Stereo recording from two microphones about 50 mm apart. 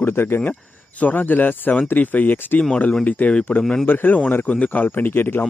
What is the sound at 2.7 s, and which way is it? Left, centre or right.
Speech, left.